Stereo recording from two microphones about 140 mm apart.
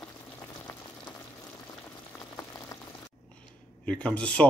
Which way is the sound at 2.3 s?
25° left (ahead or behind).